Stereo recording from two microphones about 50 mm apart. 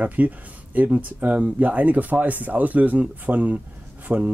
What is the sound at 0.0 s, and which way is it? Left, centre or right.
Speech, right.